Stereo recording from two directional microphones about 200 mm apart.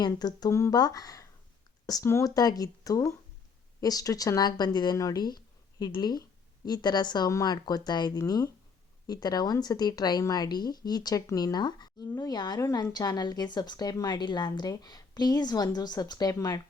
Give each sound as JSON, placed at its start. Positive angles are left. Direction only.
{"t": 0.0, "sound": "a woman's voice", "side_deg": 20}